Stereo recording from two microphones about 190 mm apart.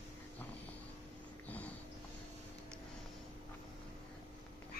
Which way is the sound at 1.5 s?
10° left (ahead or behind).